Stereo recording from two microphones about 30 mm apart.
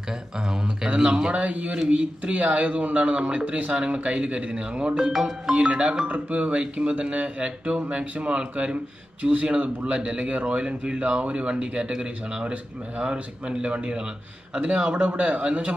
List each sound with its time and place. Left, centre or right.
0.9 s speech: right
1.3 s speech: right
1.7 s speech: right
4.9 s speech: centre
5.2 s speech: right
13.0 s speech: right
15.0 s speech: right